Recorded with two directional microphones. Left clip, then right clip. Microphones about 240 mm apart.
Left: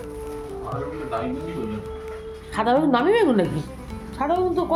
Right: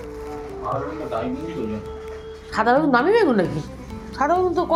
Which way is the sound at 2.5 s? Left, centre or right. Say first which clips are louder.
Right 2 dB; centre.